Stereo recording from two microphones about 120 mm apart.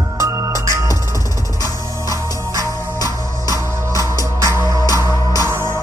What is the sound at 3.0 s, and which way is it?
Music, 30° left (ahead or behind).